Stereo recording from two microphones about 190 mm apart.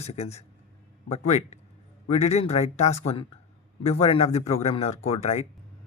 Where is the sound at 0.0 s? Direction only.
35° left (ahead or behind).